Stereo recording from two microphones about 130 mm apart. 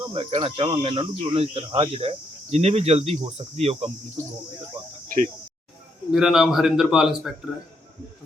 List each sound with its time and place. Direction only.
0.0 s speech: 45° right (ahead or behind)
4.8 s speech: 35° right (ahead or behind)
6.1 s a man's voice: 5° right (ahead or behind)